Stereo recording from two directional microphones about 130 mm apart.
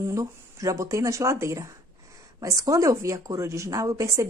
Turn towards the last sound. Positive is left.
turn(degrees=-25)  # may be behind; listen again after turning